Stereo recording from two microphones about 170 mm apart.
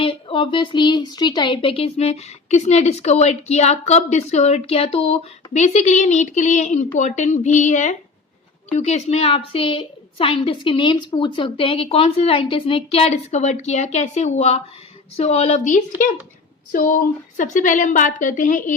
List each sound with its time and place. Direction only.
0.0 s a woman's voice: 30° left (ahead or behind)
16.7 s a woman's voice: 55° left (ahead or behind)